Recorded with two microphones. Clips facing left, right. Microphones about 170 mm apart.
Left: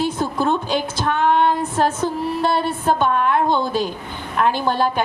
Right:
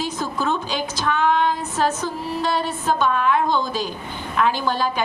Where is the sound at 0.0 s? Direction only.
55° left (ahead or behind).